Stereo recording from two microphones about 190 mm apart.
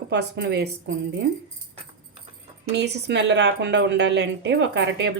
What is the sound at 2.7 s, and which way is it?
Speech, 65° right (ahead or behind).